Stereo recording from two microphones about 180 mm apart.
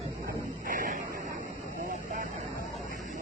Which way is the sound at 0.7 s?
50° right (ahead or behind).